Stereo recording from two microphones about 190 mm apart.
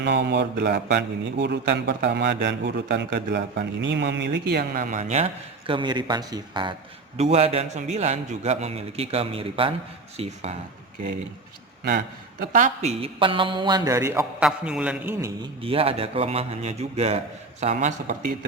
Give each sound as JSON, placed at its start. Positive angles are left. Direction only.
{"t": 0.0, "sound": "a man's voice", "side_deg": -65}
{"t": 11.8, "sound": "a man's voice", "side_deg": -55}
{"t": 12.5, "sound": "a man's voice", "side_deg": -40}
{"t": 15.4, "sound": "a man's voice", "side_deg": -30}